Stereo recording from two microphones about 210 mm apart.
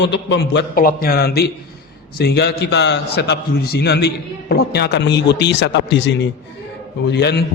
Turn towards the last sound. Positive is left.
turn(degrees=50)  # may be behind; listen again after turning